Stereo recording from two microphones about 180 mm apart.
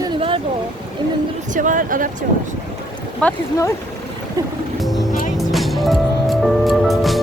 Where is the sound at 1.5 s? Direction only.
45° right (ahead or behind).